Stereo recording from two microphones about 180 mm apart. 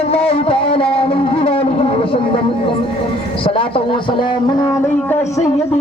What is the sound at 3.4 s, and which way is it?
Speech, 30° left (ahead or behind).